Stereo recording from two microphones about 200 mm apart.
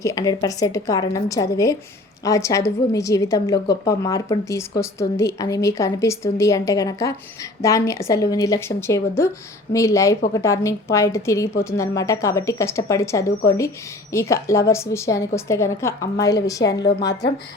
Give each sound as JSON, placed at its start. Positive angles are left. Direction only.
{"t": 0.0, "sound": "a woman's voice", "side_deg": 15}